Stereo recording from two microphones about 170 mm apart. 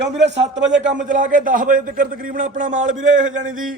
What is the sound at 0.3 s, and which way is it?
Speech, 90° right.